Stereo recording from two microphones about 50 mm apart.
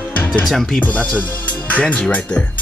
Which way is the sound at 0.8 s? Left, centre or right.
Left.